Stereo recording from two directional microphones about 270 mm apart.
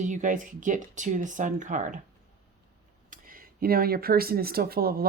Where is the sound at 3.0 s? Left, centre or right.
Right.